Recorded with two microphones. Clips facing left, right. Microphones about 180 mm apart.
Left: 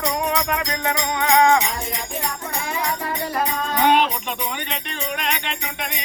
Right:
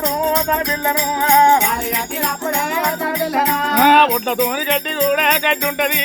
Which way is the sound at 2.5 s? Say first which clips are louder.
Right 4 dB; 65° right (ahead or behind).